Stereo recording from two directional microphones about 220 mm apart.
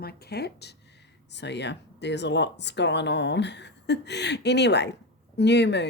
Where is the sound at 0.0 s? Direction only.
45° left (ahead or behind).